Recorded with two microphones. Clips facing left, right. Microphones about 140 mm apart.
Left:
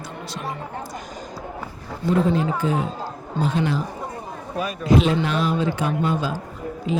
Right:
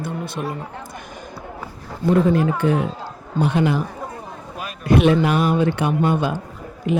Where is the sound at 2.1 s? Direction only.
60° right (ahead or behind).